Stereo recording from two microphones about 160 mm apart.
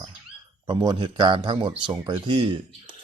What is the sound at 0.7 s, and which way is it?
Speech, 25° right (ahead or behind).